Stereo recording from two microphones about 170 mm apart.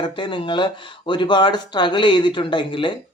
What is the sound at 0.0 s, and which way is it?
Speech, 30° left (ahead or behind).